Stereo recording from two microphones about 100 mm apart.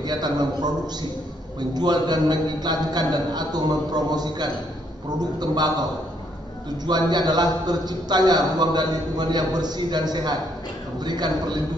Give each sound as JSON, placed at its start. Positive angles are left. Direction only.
{"t": 0.0, "sound": "a man's voice", "side_deg": -45}
{"t": 6.9, "sound": "a man's voice", "side_deg": -45}